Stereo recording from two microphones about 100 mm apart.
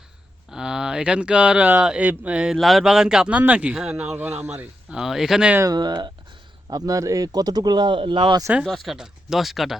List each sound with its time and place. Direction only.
0.5 s speech: 5° right (ahead or behind)
4.2 s speech: 20° right (ahead or behind)
4.9 s speech: 5° right (ahead or behind)
5.7 s speech: 45° right (ahead or behind)
8.6 s speech: centre (ahead or behind)